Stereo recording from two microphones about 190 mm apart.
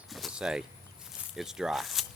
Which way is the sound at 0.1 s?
Centre (ahead or behind).